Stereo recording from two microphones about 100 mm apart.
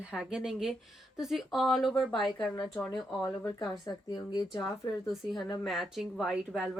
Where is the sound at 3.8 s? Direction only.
40° left (ahead or behind).